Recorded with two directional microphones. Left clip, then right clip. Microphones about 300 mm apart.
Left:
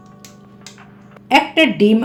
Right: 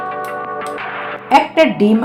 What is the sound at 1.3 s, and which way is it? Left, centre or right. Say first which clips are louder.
Speech: right 2 dB; centre.